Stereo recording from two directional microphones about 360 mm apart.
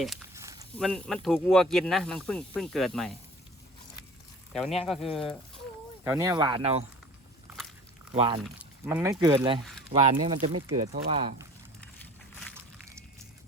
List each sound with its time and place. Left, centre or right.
0.0 s speech: centre
4.5 s speech: centre
8.1 s speech: centre
8.4 s speech: centre
12.5 s walk: centre